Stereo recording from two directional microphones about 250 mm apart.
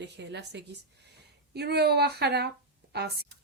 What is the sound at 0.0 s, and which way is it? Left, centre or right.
A woman's voice, right.